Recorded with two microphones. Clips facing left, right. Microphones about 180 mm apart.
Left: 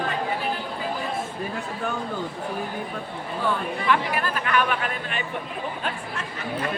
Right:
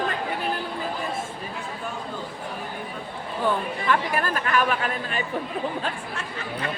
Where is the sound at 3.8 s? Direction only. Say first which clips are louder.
Even; 45° right (ahead or behind).